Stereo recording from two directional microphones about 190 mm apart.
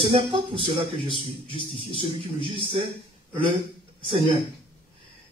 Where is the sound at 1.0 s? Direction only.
25° left (ahead or behind).